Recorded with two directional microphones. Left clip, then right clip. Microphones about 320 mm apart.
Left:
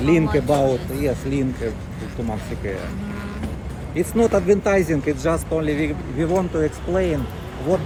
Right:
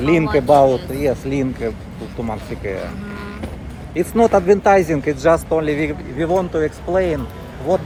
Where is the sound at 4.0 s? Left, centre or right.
Centre.